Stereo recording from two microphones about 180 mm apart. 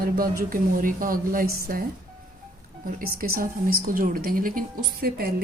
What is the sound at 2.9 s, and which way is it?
A woman's voice, 55° right (ahead or behind).